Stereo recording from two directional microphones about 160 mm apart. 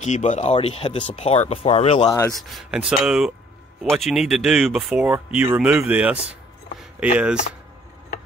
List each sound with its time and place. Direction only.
0.0 s speech: 50° left (ahead or behind)
2.0 s speech: 20° left (ahead or behind)
2.3 s speech: centre (ahead or behind)
6.8 s a sound: 10° right (ahead or behind)